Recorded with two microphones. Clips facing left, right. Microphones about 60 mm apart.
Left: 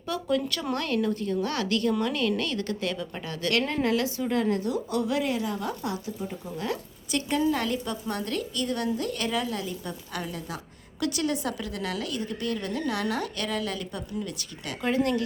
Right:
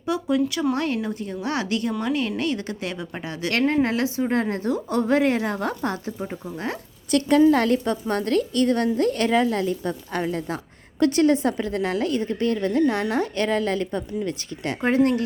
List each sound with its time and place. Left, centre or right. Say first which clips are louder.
0.0 s speech: right 5 dB; centre
0.8 s a woman's voice: right 2 dB; right
6.4 s a woman's voice: even; right
7.1 s a woman's voice: right 9 dB; right